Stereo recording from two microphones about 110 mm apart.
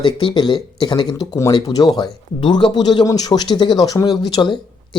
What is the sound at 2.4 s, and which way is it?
Speech, 50° left (ahead or behind).